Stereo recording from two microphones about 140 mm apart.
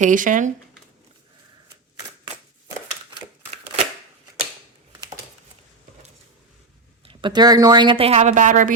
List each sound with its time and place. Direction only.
0.0 s speech: 70° right (ahead or behind)
7.0 s speech: 35° right (ahead or behind); by 8.7 s 65° right (ahead or behind)